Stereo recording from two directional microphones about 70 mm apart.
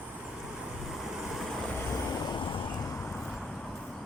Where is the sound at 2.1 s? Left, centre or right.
Left.